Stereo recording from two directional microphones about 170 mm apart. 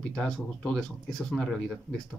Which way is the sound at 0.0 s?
5° left (ahead or behind).